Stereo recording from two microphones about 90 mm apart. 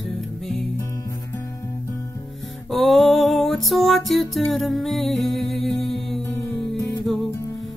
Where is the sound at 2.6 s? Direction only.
Centre (ahead or behind).